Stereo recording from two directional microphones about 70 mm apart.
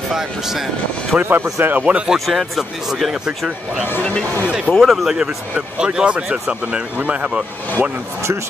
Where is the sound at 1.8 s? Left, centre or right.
Centre.